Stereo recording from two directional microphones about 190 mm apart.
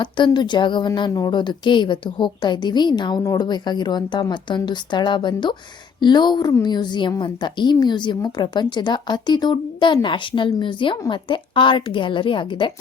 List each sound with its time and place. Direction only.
0.0 s a woman's voice: 25° left (ahead or behind)